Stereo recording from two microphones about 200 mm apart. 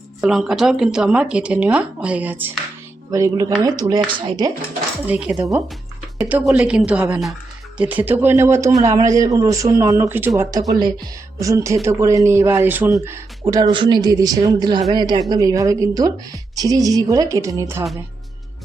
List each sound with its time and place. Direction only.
0.2 s a woman's voice: centre (ahead or behind); by 4.5 s 20° right (ahead or behind)
5.0 s a woman's voice: 5° right (ahead or behind)
13.4 s a woman's voice: 20° right (ahead or behind)